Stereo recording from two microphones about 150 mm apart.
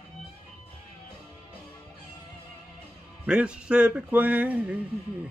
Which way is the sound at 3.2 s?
5° right (ahead or behind).